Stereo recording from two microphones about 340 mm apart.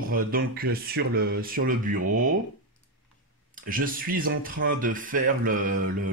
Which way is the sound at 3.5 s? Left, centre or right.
Right.